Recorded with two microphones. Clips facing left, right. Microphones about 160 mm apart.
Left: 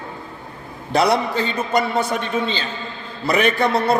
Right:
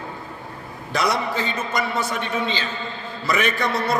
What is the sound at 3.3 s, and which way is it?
Speech, 35° left (ahead or behind).